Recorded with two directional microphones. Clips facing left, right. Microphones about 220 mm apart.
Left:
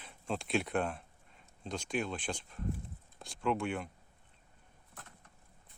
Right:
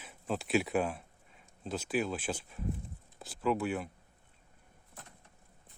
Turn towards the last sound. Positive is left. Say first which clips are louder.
# right 2 dB
turn(degrees=-5)  # may be behind; listen again after turning